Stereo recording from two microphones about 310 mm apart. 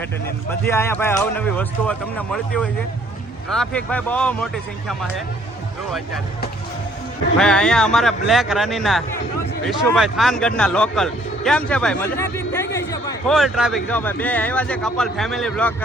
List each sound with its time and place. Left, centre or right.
0.6 s speech: centre
7.3 s speech: centre